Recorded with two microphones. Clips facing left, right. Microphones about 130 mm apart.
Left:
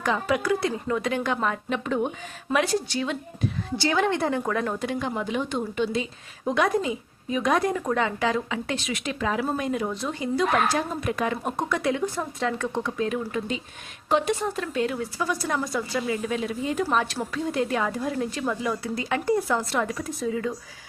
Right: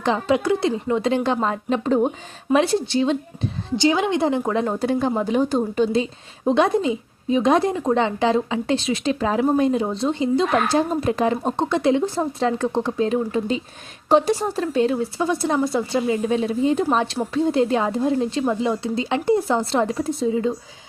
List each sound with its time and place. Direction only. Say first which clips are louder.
0.0 s a woman's voice: right 5 dB; 25° right (ahead or behind)
4.8 s a woman's voice: right 7 dB; 35° right (ahead or behind)